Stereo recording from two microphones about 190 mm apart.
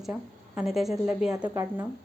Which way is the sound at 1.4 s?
15° right (ahead or behind).